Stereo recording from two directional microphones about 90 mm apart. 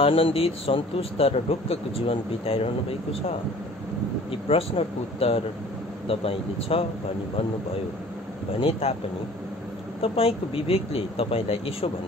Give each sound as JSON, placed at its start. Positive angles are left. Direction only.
{"t": 0.0, "sound": "speech", "side_deg": 90}
{"t": 8.8, "sound": "speech", "side_deg": 90}
{"t": 10.0, "sound": "speech", "side_deg": 90}